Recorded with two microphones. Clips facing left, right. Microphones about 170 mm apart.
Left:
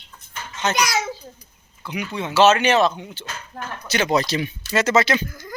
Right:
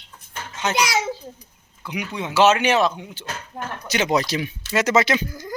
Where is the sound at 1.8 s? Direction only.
15° right (ahead or behind).